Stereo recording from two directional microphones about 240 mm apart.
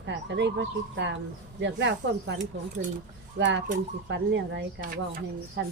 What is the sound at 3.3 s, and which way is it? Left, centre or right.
Speech, right.